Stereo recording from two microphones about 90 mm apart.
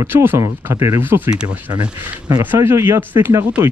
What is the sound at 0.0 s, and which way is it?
Speech, 25° right (ahead or behind).